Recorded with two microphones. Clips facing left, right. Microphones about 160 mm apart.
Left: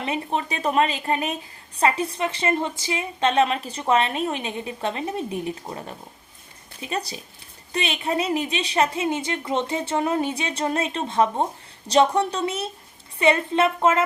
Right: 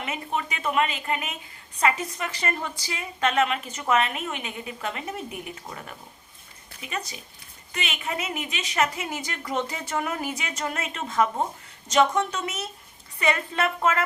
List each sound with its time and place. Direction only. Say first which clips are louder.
0.0 s a woman's voice: left 4 dB; 35° left (ahead or behind)